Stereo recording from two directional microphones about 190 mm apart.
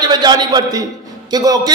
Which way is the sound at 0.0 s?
20° right (ahead or behind).